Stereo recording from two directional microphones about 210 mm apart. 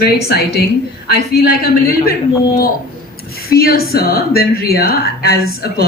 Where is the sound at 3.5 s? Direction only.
45° left (ahead or behind).